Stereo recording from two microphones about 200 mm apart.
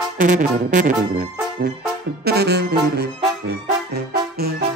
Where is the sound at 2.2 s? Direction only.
55° right (ahead or behind).